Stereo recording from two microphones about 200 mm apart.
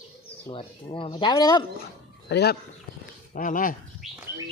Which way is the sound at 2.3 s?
55° left (ahead or behind).